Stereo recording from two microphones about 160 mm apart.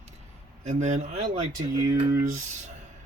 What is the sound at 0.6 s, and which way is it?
Speech, 45° right (ahead or behind).